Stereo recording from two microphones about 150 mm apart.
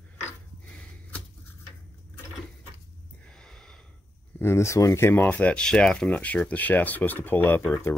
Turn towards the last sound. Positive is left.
turn(degrees=15)  # may be behind; listen again after turning